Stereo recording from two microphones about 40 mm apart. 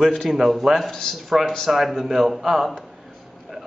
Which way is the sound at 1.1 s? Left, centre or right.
Centre.